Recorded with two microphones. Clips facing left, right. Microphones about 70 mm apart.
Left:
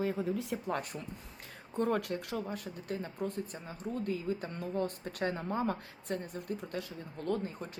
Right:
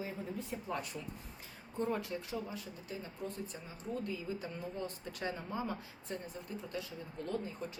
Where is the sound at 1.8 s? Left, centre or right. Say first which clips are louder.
Left 5 dB; left.